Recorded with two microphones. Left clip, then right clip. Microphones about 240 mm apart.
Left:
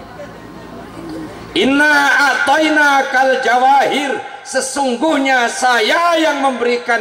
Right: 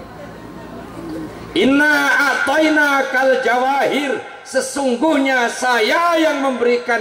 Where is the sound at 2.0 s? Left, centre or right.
Centre.